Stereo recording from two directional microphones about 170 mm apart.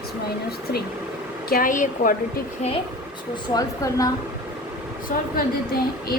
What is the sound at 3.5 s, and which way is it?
Speech, 20° left (ahead or behind).